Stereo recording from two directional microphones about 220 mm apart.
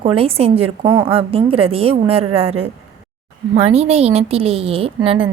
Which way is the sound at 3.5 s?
30° right (ahead or behind).